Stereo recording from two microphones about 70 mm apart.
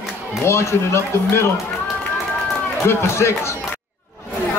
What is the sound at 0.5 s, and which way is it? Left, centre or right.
Speech, left.